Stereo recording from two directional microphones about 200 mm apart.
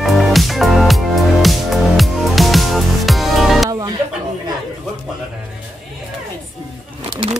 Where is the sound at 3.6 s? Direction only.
15° right (ahead or behind).